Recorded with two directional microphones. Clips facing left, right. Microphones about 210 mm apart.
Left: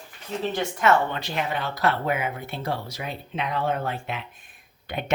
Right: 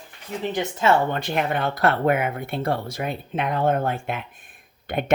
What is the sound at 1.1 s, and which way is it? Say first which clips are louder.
Speech: right 4 dB; 55° right (ahead or behind).